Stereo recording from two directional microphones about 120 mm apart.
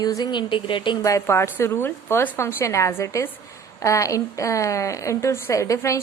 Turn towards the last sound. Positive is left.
turn(degrees=25)  # may be behind; listen again after turning